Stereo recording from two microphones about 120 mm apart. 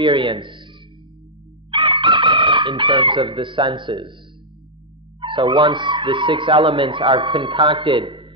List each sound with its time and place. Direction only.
0.0 s speech: 45° right (ahead or behind)
1.7 s chicken: 45° right (ahead or behind)
5.2 s a sound: 45° right (ahead or behind)
5.6 s speech: 40° right (ahead or behind)